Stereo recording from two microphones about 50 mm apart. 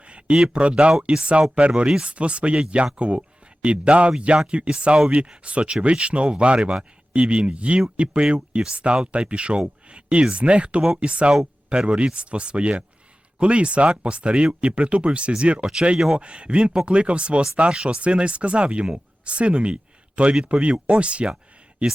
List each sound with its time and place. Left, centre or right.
0.0 s a sound: right
0.3 s speech: centre
7.1 s speech: right